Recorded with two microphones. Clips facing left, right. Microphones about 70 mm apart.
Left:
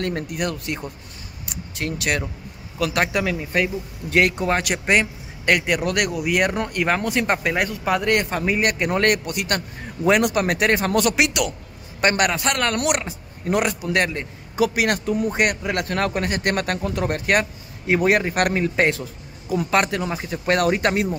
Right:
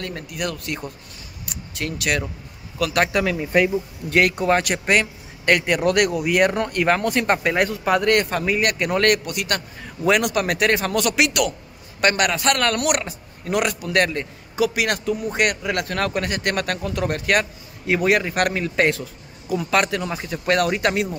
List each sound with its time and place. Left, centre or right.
0.0 s speech: left
1.8 s speech: left
3.3 s speech: centre
4.8 s speech: centre; by 13.7 s left
13.8 s speech: centre
14.6 s speech: left
18.6 s speech: left
20.4 s speech: left